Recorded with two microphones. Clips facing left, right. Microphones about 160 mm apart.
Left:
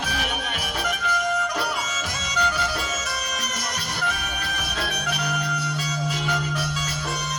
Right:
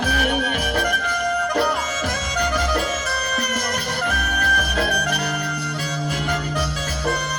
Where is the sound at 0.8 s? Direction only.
55° right (ahead or behind).